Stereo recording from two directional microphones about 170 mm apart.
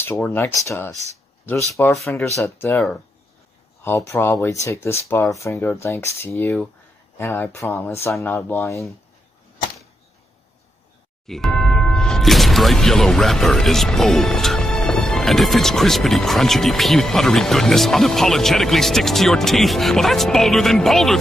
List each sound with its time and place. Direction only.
0.2 s speech: 10° left (ahead or behind)
3.8 s speech: 15° left (ahead or behind)
11.2 s speech: centre (ahead or behind)